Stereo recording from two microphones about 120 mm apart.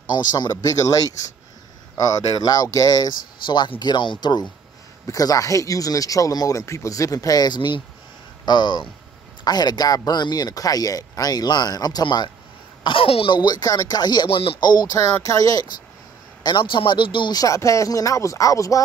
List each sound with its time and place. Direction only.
0.1 s speech: 35° left (ahead or behind)
12.8 s speech: 50° left (ahead or behind)
14.6 s speech: 35° left (ahead or behind)
15.0 s speech: 25° left (ahead or behind)
16.4 s speech: 40° left (ahead or behind)